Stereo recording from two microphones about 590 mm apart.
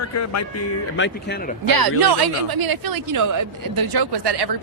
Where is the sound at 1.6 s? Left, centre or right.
Right.